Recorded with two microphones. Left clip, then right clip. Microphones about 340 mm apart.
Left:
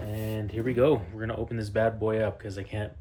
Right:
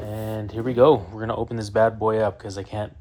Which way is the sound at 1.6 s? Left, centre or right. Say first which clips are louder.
Right 7 dB; centre.